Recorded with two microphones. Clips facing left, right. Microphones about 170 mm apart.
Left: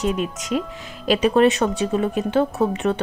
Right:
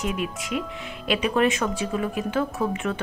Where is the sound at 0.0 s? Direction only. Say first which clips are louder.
Left 5 dB; 35° left (ahead or behind).